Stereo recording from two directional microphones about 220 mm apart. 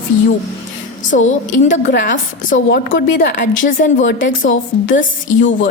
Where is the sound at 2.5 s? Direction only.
55° left (ahead or behind).